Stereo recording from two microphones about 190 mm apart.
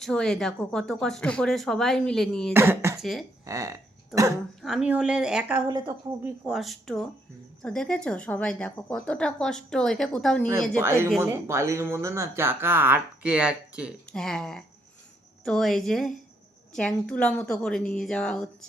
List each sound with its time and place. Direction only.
0.0 s speech: centre (ahead or behind)
2.5 s speech: 10° right (ahead or behind)
3.0 s speech: centre (ahead or behind)
3.4 s burping: 15° right (ahead or behind)
4.6 s speech: 5° right (ahead or behind)
5.6 s speech: 20° right (ahead or behind)
6.2 s speech: centre (ahead or behind)
10.8 s speech: 15° right (ahead or behind); by 18.4 s 5° left (ahead or behind)